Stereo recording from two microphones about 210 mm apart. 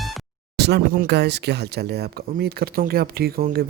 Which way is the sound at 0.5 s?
50° right (ahead or behind).